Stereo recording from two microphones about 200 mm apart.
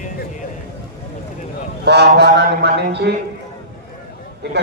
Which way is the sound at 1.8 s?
55° right (ahead or behind).